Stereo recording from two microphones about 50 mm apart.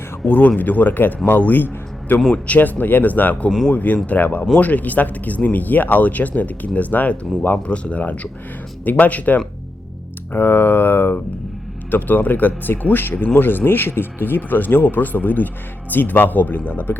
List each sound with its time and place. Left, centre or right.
0.3 s a man's voice: left
10.3 s speech: left